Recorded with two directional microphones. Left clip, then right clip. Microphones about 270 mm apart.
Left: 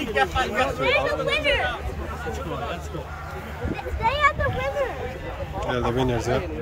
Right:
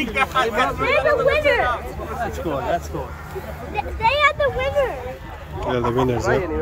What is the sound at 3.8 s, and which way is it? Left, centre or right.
Speech, right.